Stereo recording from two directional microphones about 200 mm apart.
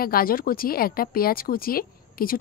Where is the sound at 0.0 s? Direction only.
45° left (ahead or behind).